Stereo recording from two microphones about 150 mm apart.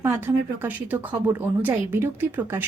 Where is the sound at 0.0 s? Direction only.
15° right (ahead or behind).